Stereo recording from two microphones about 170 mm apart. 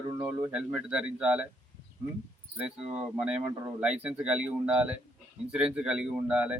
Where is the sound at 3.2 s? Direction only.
5° right (ahead or behind).